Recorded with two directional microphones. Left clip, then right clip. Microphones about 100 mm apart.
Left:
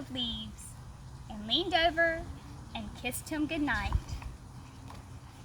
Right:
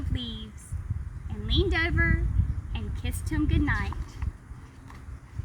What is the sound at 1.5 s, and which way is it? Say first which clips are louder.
Speech: even; 10° left (ahead or behind).